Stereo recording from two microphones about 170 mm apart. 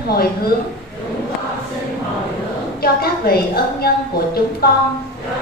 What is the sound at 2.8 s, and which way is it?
A woman's voice, 65° left (ahead or behind).